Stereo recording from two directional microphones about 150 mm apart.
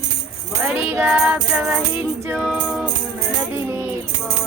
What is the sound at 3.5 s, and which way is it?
Music, 15° right (ahead or behind).